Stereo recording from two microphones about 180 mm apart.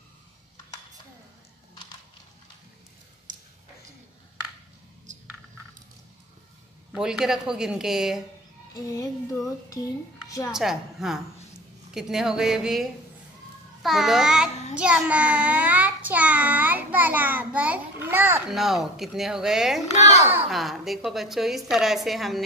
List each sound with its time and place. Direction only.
3.3 s a sound: 45° right (ahead or behind)
6.9 s a woman's voice: 5° right (ahead or behind)
8.7 s a child's voice: 20° left (ahead or behind)
10.5 s a woman's voice: centre (ahead or behind)
13.8 s a woman's voice: centre (ahead or behind)
14.8 s child singing: 5° right (ahead or behind)
18.5 s a woman's voice: centre (ahead or behind)
20.0 s a child's voice: 35° left (ahead or behind)
20.4 s a woman's voice: centre (ahead or behind)